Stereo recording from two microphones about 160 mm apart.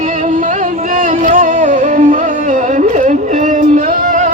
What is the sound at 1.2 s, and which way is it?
Music, 55° right (ahead or behind).